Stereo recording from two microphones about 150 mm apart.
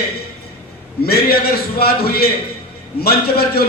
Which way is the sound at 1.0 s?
90° left.